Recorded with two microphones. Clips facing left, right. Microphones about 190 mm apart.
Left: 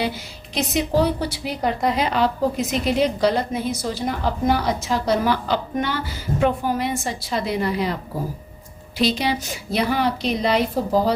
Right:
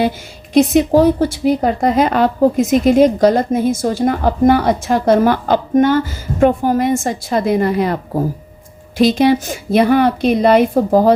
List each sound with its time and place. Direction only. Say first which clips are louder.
0.5 s a woman's voice: right 10 dB; 50° right (ahead or behind)